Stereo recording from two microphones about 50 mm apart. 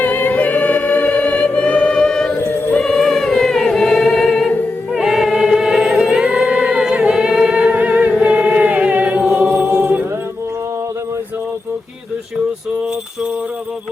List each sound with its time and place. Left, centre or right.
0.0 s choir: left; by 2.3 s centre
2.8 s a capella: centre
4.9 s singing: centre; by 8.1 s right
8.2 s chant: right
9.4 s choir: right
9.6 s music: right